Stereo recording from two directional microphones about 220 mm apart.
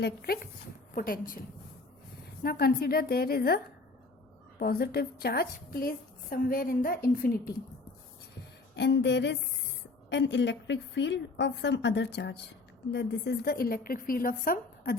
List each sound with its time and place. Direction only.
0.0 s a woman's voice: 45° left (ahead or behind)
2.4 s a woman's voice: 45° left (ahead or behind)
4.6 s a woman's voice: 45° left (ahead or behind)
8.7 s a woman's voice: 50° left (ahead or behind)